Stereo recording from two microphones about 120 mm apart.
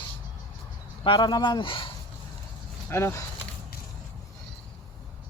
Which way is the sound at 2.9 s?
20° left (ahead or behind).